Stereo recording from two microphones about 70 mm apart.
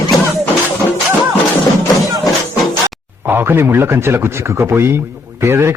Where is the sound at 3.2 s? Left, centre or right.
Right.